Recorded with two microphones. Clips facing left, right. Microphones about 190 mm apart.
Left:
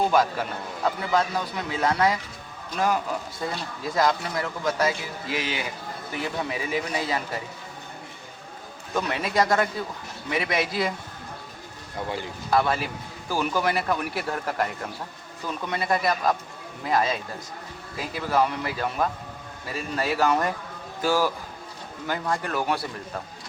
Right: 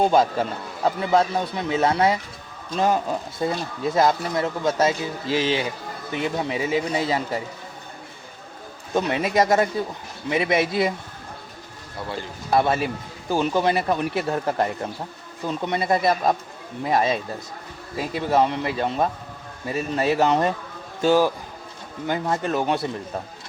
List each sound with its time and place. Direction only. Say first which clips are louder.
0.0 s speech: right 4 dB; 25° right (ahead or behind)
8.9 s speech: right 5 dB; 20° right (ahead or behind)
12.5 s speech: right 3 dB; 25° right (ahead or behind)